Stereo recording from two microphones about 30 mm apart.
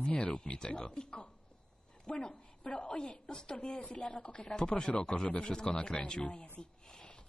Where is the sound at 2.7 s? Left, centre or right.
Left.